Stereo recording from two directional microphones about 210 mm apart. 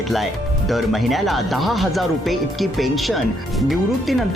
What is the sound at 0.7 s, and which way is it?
Speech, centre (ahead or behind).